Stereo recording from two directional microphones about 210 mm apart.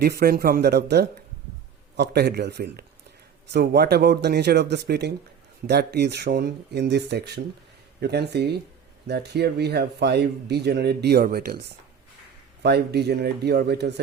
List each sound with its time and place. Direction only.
0.0 s speech: 45° right (ahead or behind)
12.6 s speech: 50° right (ahead or behind)